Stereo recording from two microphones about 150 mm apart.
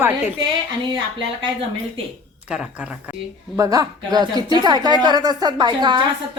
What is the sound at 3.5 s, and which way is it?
Speech, 25° right (ahead or behind).